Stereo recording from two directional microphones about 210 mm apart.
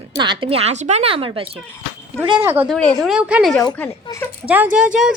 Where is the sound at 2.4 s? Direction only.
10° right (ahead or behind).